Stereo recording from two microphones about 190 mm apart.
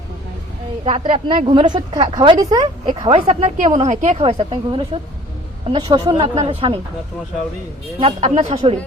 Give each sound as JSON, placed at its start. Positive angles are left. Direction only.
{"t": 0.9, "sound": "a woman's voice", "side_deg": -30}
{"t": 7.9, "sound": "speech", "side_deg": -30}